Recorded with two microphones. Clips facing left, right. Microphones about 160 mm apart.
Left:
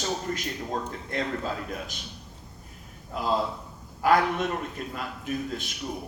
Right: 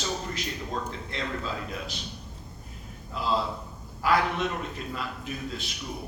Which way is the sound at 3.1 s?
50° left (ahead or behind).